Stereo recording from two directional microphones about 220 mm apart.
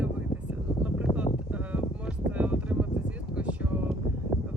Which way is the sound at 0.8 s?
5° right (ahead or behind).